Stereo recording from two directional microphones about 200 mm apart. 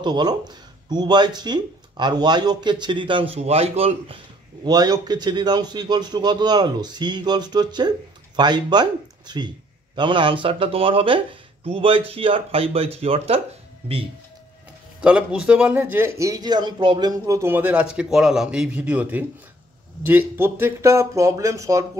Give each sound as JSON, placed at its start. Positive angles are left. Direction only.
{"t": 0.0, "sound": "speech", "side_deg": -20}
{"t": 4.6, "sound": "speech", "side_deg": -20}
{"t": 15.0, "sound": "a man's voice", "side_deg": -5}